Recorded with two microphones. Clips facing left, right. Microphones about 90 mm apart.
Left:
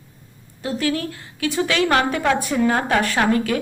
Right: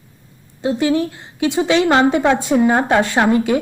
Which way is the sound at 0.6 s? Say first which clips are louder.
Right 6 dB; 20° right (ahead or behind).